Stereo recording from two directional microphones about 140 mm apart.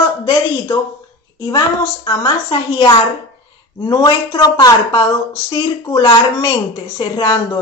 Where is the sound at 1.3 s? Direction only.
25° left (ahead or behind).